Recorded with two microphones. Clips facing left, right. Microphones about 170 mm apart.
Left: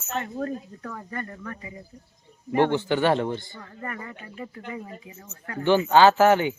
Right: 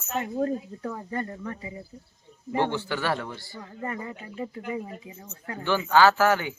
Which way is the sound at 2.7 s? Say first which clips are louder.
Left 6 dB; 20° left (ahead or behind).